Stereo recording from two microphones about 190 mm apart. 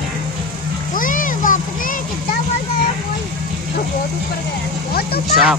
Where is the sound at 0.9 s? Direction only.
45° left (ahead or behind).